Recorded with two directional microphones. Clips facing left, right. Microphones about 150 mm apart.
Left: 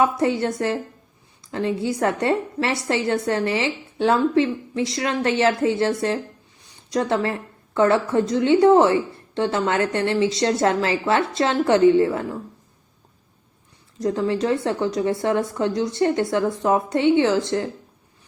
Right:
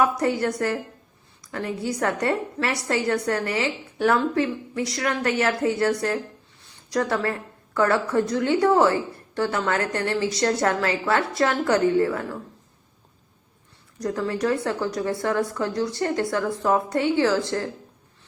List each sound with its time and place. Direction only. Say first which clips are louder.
0.0 s speech: left 2 dB; 25° left (ahead or behind)
14.0 s speech: left 3 dB; 25° left (ahead or behind)